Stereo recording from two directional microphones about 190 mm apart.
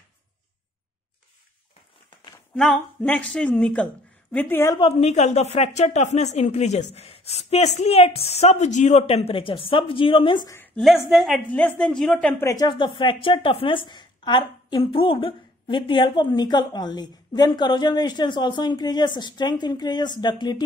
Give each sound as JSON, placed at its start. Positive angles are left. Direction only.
{"t": 2.5, "sound": "speech", "side_deg": 0}
{"t": 4.7, "sound": "speech", "side_deg": 30}
{"t": 10.8, "sound": "a woman's voice", "side_deg": 0}